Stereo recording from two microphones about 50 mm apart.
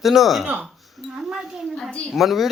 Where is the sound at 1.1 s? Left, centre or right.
Centre.